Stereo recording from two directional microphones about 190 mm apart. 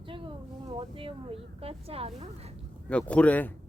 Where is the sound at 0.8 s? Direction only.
30° right (ahead or behind).